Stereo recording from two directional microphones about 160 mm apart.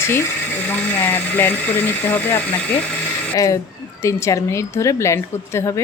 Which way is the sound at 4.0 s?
20° left (ahead or behind).